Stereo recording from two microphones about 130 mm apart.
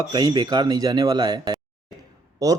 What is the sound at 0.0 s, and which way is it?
A man's voice, 30° right (ahead or behind).